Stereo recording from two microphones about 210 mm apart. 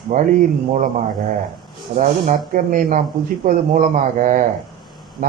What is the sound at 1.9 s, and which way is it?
A man's voice, 40° right (ahead or behind).